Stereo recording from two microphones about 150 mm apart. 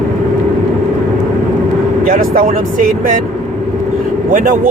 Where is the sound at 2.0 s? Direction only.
65° right (ahead or behind).